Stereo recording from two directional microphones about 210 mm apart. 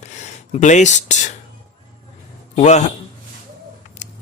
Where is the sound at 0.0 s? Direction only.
35° left (ahead or behind).